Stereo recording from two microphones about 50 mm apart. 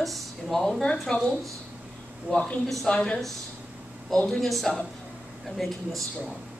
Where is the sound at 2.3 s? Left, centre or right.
Centre.